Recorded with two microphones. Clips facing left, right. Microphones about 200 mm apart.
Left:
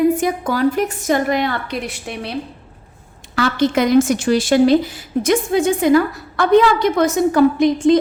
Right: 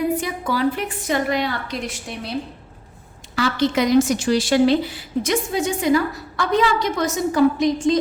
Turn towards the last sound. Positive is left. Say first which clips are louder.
# left 4 dB
turn(degrees=55)  # may be behind; listen again after turning